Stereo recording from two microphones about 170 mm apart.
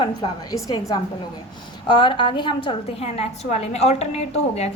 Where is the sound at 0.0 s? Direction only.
25° left (ahead or behind).